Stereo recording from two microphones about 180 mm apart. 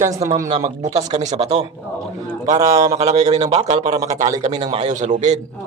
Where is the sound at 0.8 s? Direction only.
40° right (ahead or behind).